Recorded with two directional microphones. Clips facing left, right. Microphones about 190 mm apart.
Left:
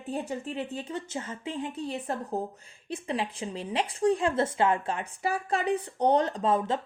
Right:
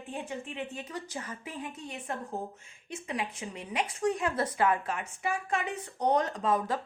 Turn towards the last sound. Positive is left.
turn(degrees=25)  # may be behind; listen again after turning